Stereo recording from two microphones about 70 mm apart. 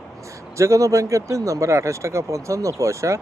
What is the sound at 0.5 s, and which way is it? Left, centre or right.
Speech, right.